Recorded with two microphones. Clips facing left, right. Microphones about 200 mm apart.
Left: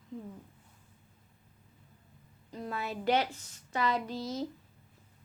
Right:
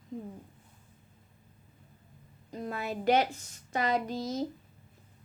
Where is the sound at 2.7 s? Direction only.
45° right (ahead or behind).